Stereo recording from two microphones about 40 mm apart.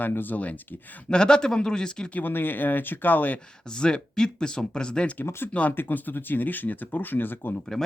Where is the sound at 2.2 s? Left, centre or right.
Left.